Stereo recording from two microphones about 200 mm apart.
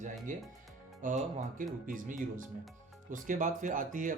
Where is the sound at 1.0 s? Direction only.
40° right (ahead or behind).